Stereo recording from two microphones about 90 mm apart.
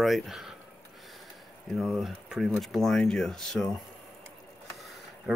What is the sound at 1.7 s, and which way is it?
Speech, centre (ahead or behind).